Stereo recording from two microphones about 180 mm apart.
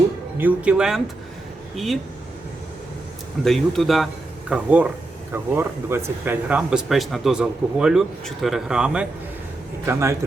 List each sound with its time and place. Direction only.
0.3 s speech: 10° right (ahead or behind)
3.4 s a man's voice: centre (ahead or behind); by 10.2 s 15° right (ahead or behind)